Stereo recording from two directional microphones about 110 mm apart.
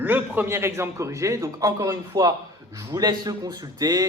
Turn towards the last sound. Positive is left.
turn(degrees=-35)  # may be behind; listen again after turning